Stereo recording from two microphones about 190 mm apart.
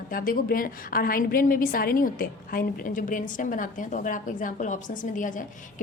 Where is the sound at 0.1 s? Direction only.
50° left (ahead or behind).